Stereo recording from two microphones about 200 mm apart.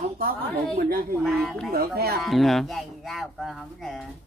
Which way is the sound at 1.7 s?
50° right (ahead or behind).